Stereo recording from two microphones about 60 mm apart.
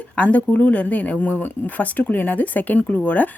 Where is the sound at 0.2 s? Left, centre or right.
Left.